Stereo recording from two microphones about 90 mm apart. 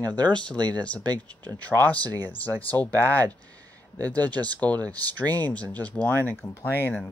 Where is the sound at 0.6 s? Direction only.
55° right (ahead or behind).